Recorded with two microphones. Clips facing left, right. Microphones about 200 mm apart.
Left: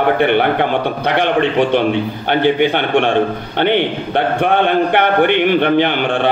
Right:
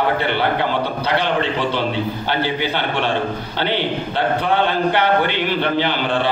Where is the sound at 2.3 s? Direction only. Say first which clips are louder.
Left 10 dB; 60° left (ahead or behind).